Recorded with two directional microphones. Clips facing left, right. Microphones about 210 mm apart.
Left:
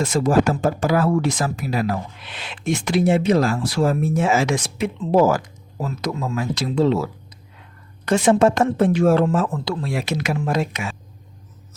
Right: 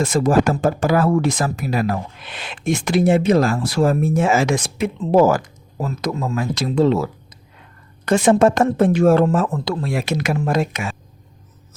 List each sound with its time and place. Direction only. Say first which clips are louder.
0.0 s speech: right 1 dB; 50° right (ahead or behind)
8.0 s speech: right 2 dB; 50° right (ahead or behind)